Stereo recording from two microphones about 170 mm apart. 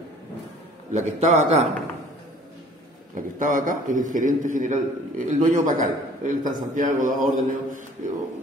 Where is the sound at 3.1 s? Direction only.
50° right (ahead or behind).